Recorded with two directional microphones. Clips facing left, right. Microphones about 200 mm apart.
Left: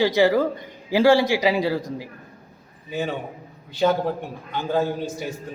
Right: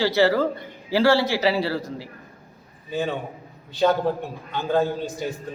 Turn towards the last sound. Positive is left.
turn(degrees=10)  # may be behind; listen again after turning